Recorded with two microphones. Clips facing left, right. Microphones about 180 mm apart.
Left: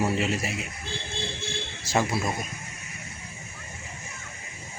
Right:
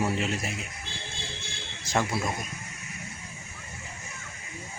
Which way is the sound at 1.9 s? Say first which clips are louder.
Left 2 dB; 5° left (ahead or behind).